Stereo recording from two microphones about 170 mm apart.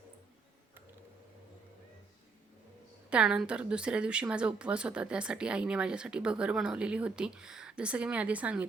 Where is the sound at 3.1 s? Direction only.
5° right (ahead or behind).